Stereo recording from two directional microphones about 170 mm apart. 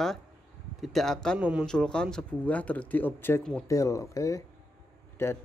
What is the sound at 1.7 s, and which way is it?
Speech, 5° left (ahead or behind).